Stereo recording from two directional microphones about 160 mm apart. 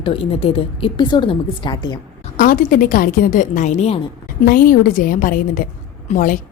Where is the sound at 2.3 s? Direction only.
60° left (ahead or behind); by 3.9 s 45° left (ahead or behind).